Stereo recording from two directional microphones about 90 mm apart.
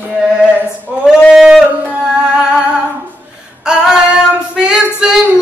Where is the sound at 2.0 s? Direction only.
5° right (ahead or behind).